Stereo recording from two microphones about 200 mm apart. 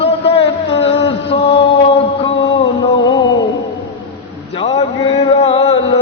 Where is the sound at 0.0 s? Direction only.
30° left (ahead or behind).